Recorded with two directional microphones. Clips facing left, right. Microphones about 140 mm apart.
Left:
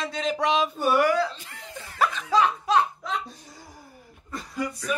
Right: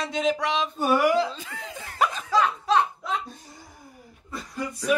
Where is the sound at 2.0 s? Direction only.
20° right (ahead or behind).